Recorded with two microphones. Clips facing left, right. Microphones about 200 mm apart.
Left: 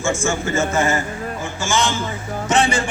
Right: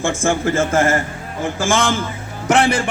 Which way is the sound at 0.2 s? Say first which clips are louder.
Right 3 dB; 55° right (ahead or behind).